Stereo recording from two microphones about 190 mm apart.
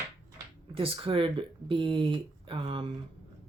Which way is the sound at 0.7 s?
30° right (ahead or behind).